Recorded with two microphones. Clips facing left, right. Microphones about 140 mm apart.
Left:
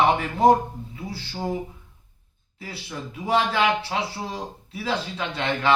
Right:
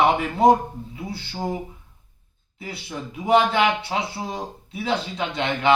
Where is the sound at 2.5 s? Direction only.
20° right (ahead or behind).